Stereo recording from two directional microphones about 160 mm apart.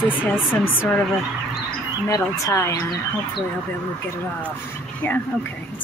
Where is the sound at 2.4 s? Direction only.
20° left (ahead or behind).